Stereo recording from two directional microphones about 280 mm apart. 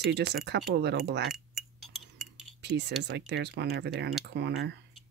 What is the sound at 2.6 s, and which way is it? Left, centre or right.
Speech, right.